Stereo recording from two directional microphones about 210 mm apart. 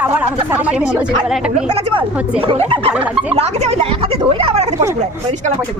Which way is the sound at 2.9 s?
5° right (ahead or behind).